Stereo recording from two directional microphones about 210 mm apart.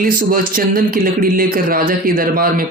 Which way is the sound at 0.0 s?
45° right (ahead or behind).